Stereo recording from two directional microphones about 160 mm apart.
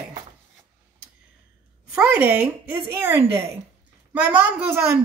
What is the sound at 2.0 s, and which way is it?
A woman's voice, 10° right (ahead or behind).